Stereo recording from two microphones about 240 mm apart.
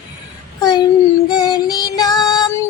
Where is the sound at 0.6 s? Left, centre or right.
Centre.